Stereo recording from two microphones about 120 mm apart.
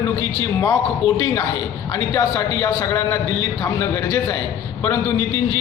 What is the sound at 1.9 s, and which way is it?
A man's voice, 30° left (ahead or behind).